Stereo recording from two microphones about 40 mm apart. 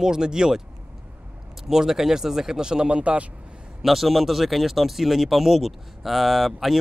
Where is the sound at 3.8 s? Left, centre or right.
Centre.